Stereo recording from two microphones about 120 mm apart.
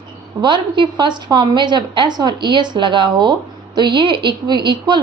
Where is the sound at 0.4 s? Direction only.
40° right (ahead or behind).